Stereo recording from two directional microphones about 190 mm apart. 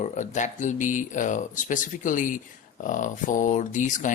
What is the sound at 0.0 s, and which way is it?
Speech, 40° left (ahead or behind).